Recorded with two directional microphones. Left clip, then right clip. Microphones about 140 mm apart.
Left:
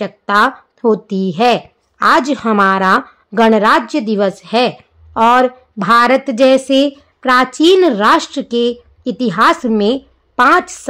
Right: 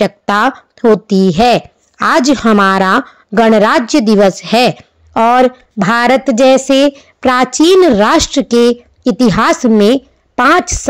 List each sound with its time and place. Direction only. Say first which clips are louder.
0.0 s a woman's voice: right 1 dB; 50° right (ahead or behind); by 10.9 s 35° right (ahead or behind)